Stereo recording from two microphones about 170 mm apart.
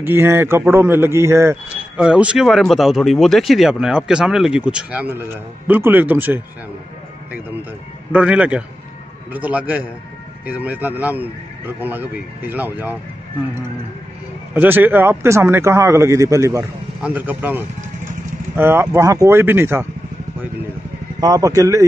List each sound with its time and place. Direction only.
0.0 s a man's voice: 15° right (ahead or behind)
8.1 s a man's voice: 5° right (ahead or behind)
14.5 s a man's voice: 10° right (ahead or behind)
21.2 s speech: 20° right (ahead or behind)